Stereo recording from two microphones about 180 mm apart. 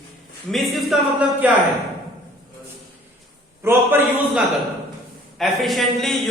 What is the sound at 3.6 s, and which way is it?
Speech, 10° right (ahead or behind).